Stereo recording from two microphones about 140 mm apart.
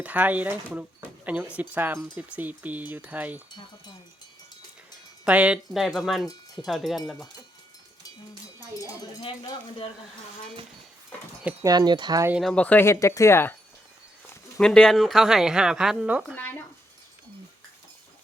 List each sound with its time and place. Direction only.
0.0 s speech: 10° right (ahead or behind)
5.2 s speech: 10° right (ahead or behind)
11.6 s speech: 30° right (ahead or behind)
12.4 s speech: 5° left (ahead or behind)
14.6 s speech: 5° left (ahead or behind)
16.3 s a sound: 15° left (ahead or behind)